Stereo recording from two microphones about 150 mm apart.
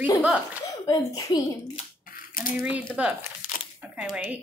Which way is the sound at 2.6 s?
10° right (ahead or behind).